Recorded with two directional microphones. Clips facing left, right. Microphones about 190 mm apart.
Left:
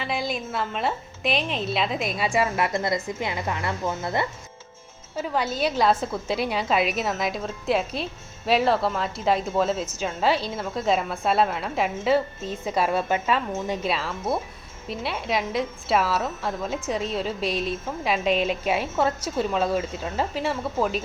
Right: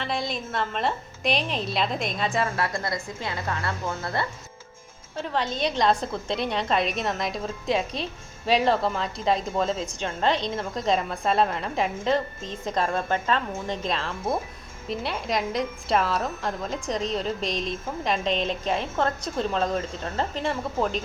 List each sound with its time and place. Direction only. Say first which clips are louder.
0.0 s a woman's voice: left 1 dB; 5° left (ahead or behind)
2.6 s a woman's voice: left 4 dB; 20° left (ahead or behind)
5.1 s a woman's voice: left 2 dB; 5° left (ahead or behind)